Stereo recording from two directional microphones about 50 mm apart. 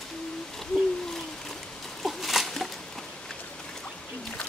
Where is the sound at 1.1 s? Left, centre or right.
Centre.